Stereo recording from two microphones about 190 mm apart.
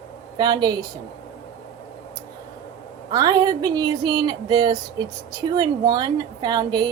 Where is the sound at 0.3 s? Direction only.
20° right (ahead or behind).